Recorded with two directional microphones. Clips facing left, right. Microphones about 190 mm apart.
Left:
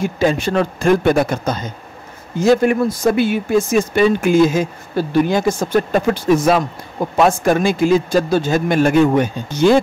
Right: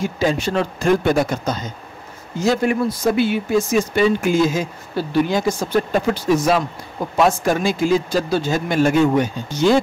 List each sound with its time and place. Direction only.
0.0 s a man's voice: 55° left (ahead or behind)